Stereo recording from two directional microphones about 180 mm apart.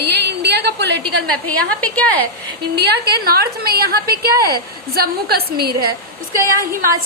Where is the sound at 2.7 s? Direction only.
65° right (ahead or behind).